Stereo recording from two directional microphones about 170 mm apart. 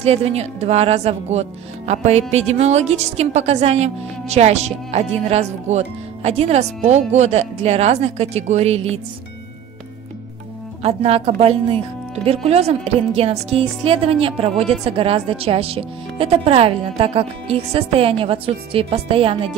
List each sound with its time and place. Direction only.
0.0 s a woman's voice: 35° right (ahead or behind)
10.8 s a woman's voice: 35° right (ahead or behind)